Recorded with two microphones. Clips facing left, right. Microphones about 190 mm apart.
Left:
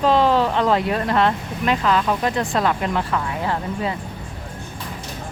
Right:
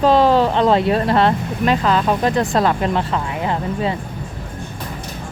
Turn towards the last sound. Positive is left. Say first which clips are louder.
# right 3 dB
turn(degrees=-20)  # may be behind; listen again after turning